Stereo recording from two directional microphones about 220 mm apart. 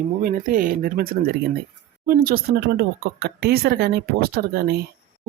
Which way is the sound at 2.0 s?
40° right (ahead or behind).